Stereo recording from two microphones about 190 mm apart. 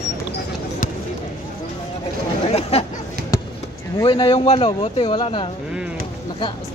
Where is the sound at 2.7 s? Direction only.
35° left (ahead or behind).